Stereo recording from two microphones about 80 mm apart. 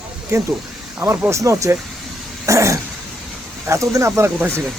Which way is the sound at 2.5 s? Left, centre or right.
Right.